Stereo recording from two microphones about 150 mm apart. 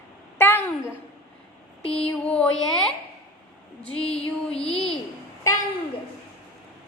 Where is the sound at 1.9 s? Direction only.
5° left (ahead or behind).